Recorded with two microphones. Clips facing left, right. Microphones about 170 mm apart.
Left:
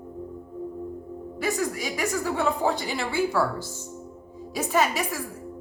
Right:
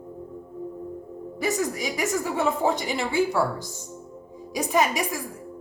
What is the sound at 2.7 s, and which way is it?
Speech, 20° right (ahead or behind).